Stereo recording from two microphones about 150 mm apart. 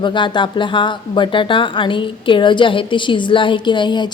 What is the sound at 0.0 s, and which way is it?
A woman's voice, 30° left (ahead or behind).